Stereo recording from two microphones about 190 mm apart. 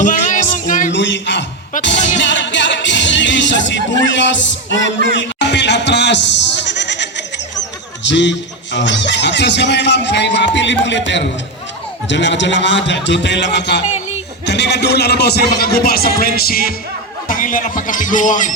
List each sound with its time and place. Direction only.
0.0 s music: 45° left (ahead or behind)
0.9 s speech: 70° left (ahead or behind)
5.1 s bleat: 65° left (ahead or behind)
8.0 s a man's voice: 70° left (ahead or behind); by 18.5 s 40° left (ahead or behind)